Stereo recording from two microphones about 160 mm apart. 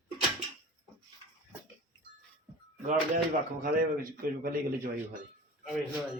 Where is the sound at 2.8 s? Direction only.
55° right (ahead or behind).